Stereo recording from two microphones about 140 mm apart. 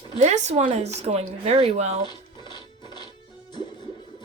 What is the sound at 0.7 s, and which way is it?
Speech, 50° right (ahead or behind).